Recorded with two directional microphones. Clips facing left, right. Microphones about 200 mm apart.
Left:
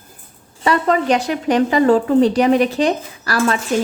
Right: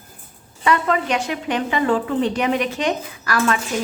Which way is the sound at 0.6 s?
35° left (ahead or behind).